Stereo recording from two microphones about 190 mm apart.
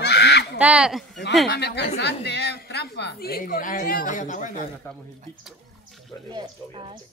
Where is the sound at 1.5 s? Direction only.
60° left (ahead or behind); by 4.6 s 40° left (ahead or behind).